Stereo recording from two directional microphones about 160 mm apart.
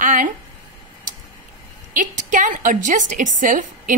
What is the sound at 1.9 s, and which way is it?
A woman's voice, 55° right (ahead or behind).